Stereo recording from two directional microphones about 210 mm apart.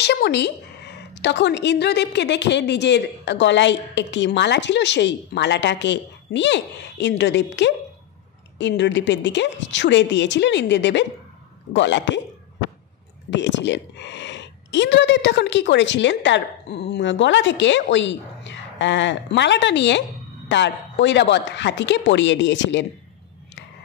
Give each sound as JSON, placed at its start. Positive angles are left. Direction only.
{"t": 0.0, "sound": "a woman's voice", "side_deg": 50}
{"t": 13.3, "sound": "a woman's voice", "side_deg": 60}